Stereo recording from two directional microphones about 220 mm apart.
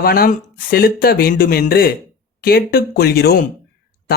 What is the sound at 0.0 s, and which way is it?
Speech, 40° left (ahead or behind).